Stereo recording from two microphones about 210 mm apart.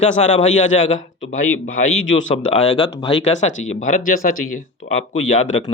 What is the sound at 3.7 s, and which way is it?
A man's voice, 40° left (ahead or behind).